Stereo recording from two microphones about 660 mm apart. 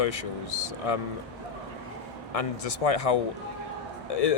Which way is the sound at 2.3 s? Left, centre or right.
Left.